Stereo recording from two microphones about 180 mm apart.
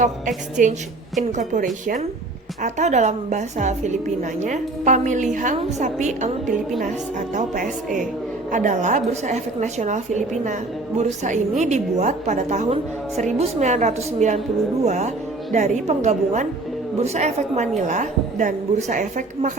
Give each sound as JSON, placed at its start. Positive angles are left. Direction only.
{"t": 0.0, "sound": "a woman's voice", "side_deg": -45}
{"t": 2.6, "sound": "a woman's voice", "side_deg": -40}
{"t": 6.5, "sound": "a woman's voice", "side_deg": 0}
{"t": 7.3, "sound": "a woman's voice", "side_deg": -50}